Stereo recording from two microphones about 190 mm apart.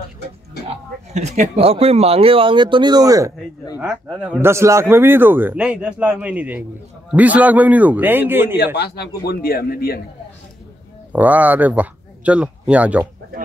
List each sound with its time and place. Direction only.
0.7 s speech: 35° right (ahead or behind); by 8.5 s 10° right (ahead or behind)
8.7 s a man's voice: 60° left (ahead or behind)
11.1 s speech: 10° right (ahead or behind)